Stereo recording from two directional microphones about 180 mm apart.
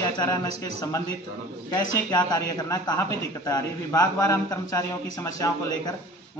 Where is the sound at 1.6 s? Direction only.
20° left (ahead or behind).